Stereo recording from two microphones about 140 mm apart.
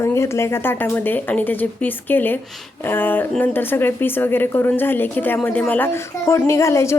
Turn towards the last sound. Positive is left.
turn(degrees=20)  # may be behind; listen again after turning